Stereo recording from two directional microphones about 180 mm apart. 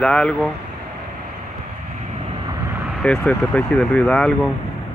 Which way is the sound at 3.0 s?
5° left (ahead or behind).